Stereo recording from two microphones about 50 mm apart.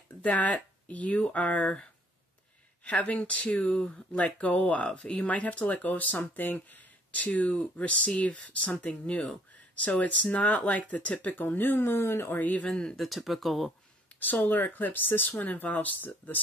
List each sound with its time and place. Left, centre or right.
0.2 s speech: left
2.8 s speech: left
7.1 s speech: left
11.4 s speech: left
11.8 s speech: left
12.3 s speech: left
12.9 s speech: centre
14.2 s speech: left